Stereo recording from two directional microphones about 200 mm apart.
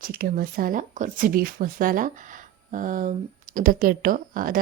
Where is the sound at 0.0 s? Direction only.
45° right (ahead or behind).